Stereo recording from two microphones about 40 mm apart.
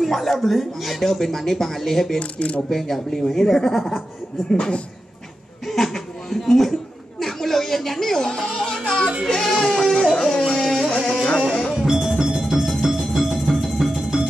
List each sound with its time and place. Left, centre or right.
0.0 s speech: centre
2.1 s speech: left
2.7 s speech: centre
5.7 s a sound: centre
7.2 s chuckle: centre
8.3 s speech: centre
10.1 s music: centre
11.8 s music: centre